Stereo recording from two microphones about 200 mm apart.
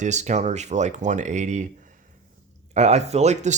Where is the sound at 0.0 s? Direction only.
35° right (ahead or behind).